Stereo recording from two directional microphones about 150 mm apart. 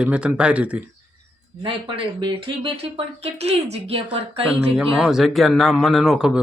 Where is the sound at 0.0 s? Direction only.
10° right (ahead or behind).